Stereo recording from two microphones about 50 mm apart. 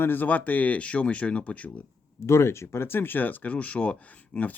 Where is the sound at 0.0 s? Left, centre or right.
Left.